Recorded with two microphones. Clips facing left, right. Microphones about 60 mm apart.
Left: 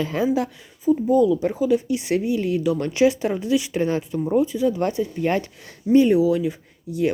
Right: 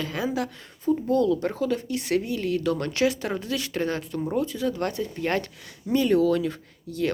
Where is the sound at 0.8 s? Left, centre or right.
Centre.